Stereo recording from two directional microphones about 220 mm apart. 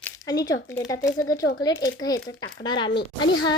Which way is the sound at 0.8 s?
15° left (ahead or behind).